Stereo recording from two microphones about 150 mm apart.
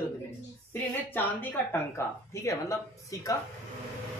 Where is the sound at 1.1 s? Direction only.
15° left (ahead or behind).